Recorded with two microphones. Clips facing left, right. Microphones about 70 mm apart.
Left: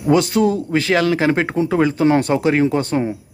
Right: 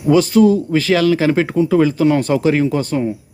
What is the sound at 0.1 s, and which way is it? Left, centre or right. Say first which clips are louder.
A man's voice: right 4 dB; left.